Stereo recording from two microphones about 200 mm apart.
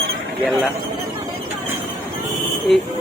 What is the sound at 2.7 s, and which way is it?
Speech, centre (ahead or behind).